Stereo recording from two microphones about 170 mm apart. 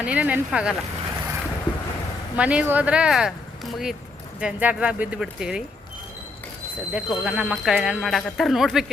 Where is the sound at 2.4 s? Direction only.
10° right (ahead or behind).